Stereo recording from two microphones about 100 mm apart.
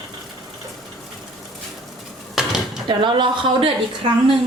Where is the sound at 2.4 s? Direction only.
5° right (ahead or behind).